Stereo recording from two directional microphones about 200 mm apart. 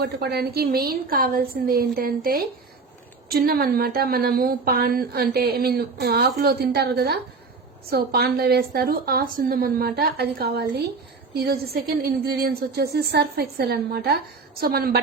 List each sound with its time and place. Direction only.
0.0 s a woman's voice: 50° right (ahead or behind)